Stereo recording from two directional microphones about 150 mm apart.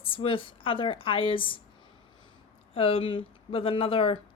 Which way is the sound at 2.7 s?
40° left (ahead or behind).